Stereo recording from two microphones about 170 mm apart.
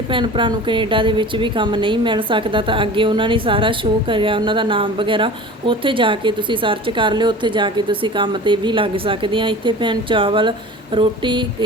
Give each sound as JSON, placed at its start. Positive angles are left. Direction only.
{"t": 0.1, "sound": "a woman's voice", "side_deg": -30}